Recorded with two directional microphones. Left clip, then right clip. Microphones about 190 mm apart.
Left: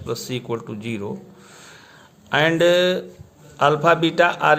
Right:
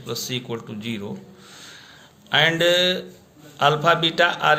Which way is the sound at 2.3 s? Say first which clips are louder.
Left 1 dB; 45° left (ahead or behind).